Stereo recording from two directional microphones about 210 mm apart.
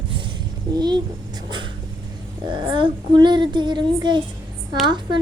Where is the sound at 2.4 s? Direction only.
20° right (ahead or behind).